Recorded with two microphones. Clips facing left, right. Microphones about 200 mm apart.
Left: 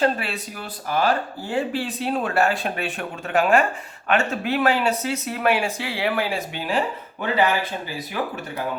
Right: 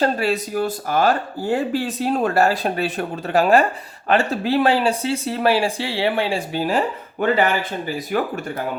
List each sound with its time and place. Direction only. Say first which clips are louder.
0.0 s speech: right 3 dB; 40° right (ahead or behind)